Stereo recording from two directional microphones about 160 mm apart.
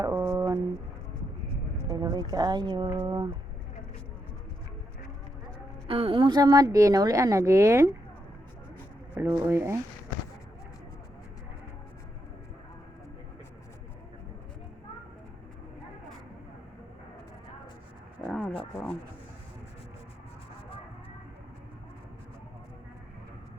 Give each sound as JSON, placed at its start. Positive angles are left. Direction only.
{"t": 0.0, "sound": "a sound", "side_deg": -20}
{"t": 1.9, "sound": "speech", "side_deg": -25}
{"t": 5.9, "sound": "a woman's voice", "side_deg": -35}
{"t": 9.1, "sound": "speech", "side_deg": -20}
{"t": 18.3, "sound": "wild animals", "side_deg": 10}